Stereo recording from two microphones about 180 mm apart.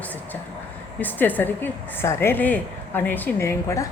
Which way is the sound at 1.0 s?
10° left (ahead or behind).